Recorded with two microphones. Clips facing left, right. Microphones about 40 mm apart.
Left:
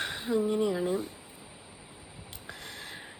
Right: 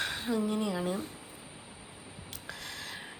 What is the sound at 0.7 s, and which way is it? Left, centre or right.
Speech, right.